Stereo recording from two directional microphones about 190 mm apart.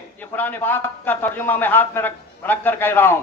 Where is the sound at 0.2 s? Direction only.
10° left (ahead or behind).